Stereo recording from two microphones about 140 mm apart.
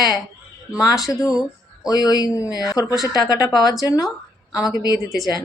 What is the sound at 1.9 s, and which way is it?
Speech, 30° left (ahead or behind).